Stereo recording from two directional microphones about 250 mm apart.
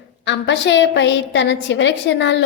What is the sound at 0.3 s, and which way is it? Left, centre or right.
A woman's voice, left.